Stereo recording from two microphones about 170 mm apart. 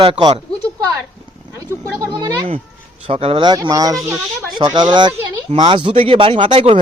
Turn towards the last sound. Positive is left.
turn(degrees=-30)  # may be behind; listen again after turning